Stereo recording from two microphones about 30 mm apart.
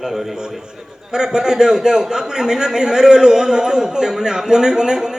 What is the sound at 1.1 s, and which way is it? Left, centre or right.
A man's voice, right.